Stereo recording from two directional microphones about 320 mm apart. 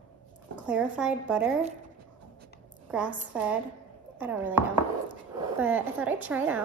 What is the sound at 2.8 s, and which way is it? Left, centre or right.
A woman's voice, centre.